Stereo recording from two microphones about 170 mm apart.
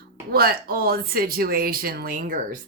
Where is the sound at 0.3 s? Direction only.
65° right (ahead or behind).